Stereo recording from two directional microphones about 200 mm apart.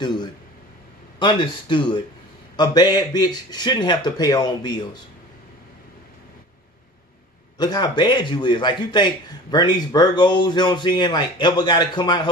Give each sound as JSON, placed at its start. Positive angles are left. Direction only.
{"t": 1.2, "sound": "a man's voice", "side_deg": 25}
{"t": 7.5, "sound": "a man's voice", "side_deg": 20}